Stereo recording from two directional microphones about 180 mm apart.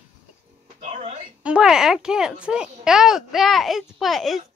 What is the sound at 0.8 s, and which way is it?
Music, 40° right (ahead or behind).